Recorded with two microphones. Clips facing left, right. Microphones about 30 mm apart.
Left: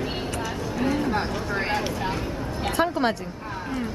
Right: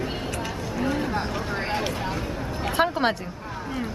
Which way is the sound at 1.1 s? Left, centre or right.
Centre.